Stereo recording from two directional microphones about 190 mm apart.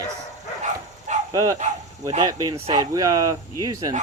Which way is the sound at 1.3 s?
20° right (ahead or behind).